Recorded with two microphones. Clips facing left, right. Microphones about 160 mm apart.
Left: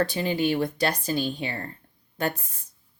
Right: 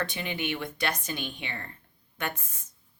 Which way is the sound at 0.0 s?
35° left (ahead or behind).